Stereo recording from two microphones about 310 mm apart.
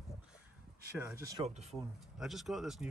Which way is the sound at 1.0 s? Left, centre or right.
Centre.